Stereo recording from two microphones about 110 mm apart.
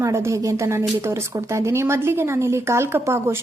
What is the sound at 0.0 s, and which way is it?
A woman's voice, 25° right (ahead or behind).